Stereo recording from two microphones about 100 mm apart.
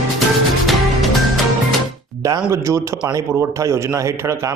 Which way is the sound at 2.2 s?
30° right (ahead or behind).